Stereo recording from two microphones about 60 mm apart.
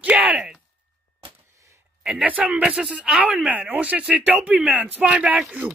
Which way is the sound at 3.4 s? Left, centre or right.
Right.